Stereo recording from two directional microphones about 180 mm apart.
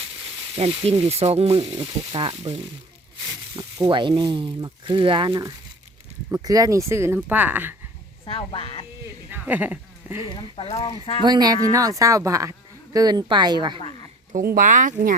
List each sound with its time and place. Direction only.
0.6 s speech: 35° right (ahead or behind); by 7.8 s 10° right (ahead or behind)
8.2 s speech: 30° left (ahead or behind)
9.3 s speech: 10° right (ahead or behind)
10.3 s speech: 30° left (ahead or behind)
11.2 s speech: 25° right (ahead or behind)
14.3 s speech: 50° right (ahead or behind)